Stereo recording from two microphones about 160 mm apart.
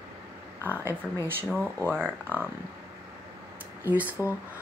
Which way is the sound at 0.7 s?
15° left (ahead or behind).